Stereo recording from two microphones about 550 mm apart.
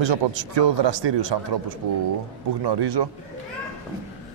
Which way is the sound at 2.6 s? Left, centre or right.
Right.